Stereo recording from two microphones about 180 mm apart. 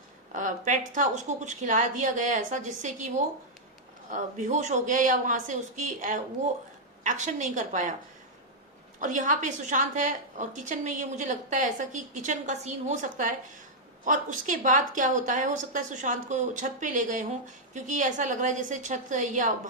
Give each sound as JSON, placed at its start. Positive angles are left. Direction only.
{"t": 0.3, "sound": "a woman's voice", "side_deg": -45}
{"t": 9.0, "sound": "a woman's voice", "side_deg": -45}